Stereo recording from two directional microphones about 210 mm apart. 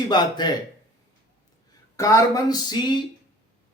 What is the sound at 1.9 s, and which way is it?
Speech, 15° left (ahead or behind).